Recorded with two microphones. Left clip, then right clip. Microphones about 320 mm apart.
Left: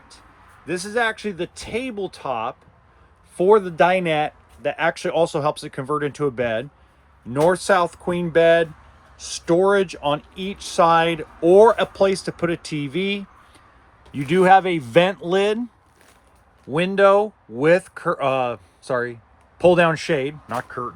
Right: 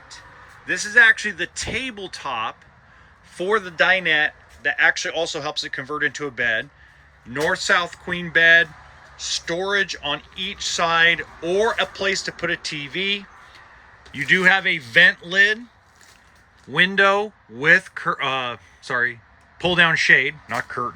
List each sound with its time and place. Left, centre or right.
0.7 s speech: centre
16.7 s speech: centre
20.6 s speech: centre